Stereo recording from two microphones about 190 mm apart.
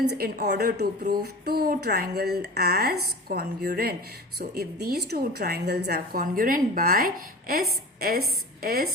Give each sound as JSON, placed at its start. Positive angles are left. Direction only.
{"t": 0.1, "sound": "a woman's voice", "side_deg": -55}